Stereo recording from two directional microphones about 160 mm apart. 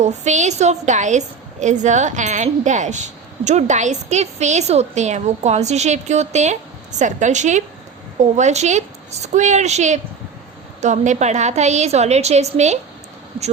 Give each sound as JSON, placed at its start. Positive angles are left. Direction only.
{"t": 0.0, "sound": "a woman's voice", "side_deg": -45}